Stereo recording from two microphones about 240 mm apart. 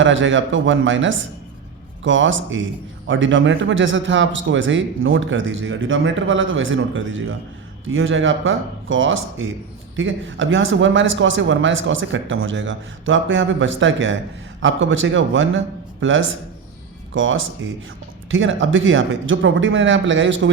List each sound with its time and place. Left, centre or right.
0.0 s a man's voice: right